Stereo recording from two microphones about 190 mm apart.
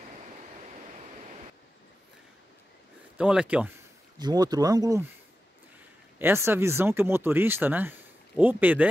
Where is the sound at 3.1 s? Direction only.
5° right (ahead or behind).